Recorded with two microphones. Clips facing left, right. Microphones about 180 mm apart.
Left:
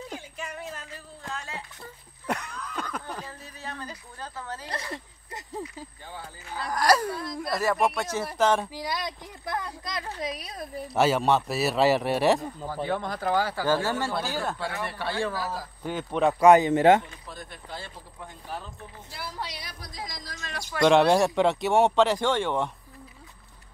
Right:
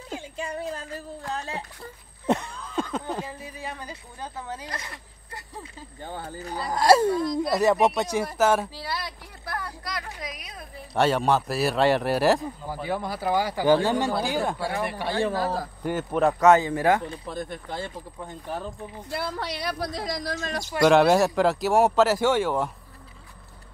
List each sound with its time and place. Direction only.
0.1 s speech: 30° right (ahead or behind)
2.2 s a sound: 25° right (ahead or behind)
3.3 s speech: 10° right (ahead or behind)
6.0 s speech: 50° right (ahead or behind)
6.7 s speech: 25° right (ahead or behind); by 8.6 s 5° right (ahead or behind)
8.6 s speech: 15° left (ahead or behind); by 10.7 s 30° left (ahead or behind)
11.0 s speech: centre (ahead or behind); by 15.3 s 15° right (ahead or behind)
15.3 s a man's voice: 55° right (ahead or behind)
15.8 s speech: 10° right (ahead or behind)
16.3 s speech: 15° left (ahead or behind)
17.3 s speech: 50° right (ahead or behind)
18.6 s speech: 60° right (ahead or behind)
20.3 s speech: 40° right (ahead or behind)
20.8 s speech: 5° right (ahead or behind)